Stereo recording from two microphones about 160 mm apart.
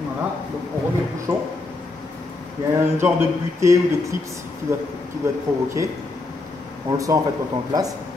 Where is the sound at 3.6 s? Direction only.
20° right (ahead or behind).